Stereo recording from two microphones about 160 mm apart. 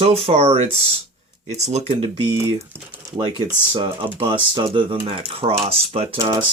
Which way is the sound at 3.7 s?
30° right (ahead or behind).